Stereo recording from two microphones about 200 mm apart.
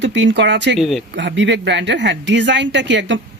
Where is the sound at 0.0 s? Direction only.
60° right (ahead or behind).